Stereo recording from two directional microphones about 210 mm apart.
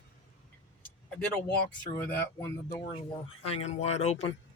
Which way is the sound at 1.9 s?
10° left (ahead or behind).